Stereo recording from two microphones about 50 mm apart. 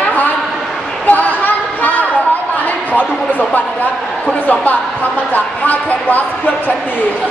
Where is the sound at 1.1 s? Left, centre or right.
Left.